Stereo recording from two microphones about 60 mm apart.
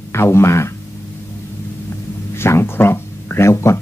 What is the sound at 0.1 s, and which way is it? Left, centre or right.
Speech, left.